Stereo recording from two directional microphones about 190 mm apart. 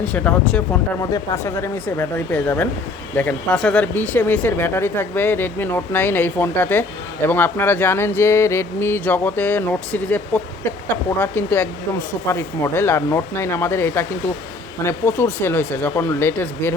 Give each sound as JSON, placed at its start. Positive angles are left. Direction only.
{"t": 0.0, "sound": "speech", "side_deg": 5}